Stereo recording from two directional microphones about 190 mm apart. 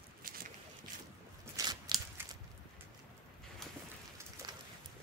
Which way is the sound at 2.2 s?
10° right (ahead or behind).